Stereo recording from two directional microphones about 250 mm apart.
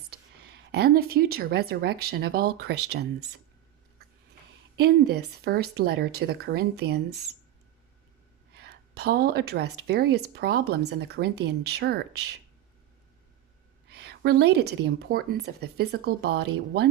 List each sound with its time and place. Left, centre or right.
0.1 s speech: right
4.8 s speech: right
8.5 s speech: right
13.9 s speech: right